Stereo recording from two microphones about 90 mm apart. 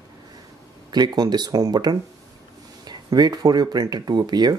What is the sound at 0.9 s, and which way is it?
Speech, 50° right (ahead or behind).